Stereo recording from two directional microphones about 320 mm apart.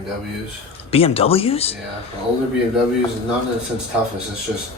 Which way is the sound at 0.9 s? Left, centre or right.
Centre.